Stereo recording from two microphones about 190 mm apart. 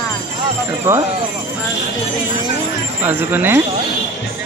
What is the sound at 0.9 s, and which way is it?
Speech, 15° right (ahead or behind).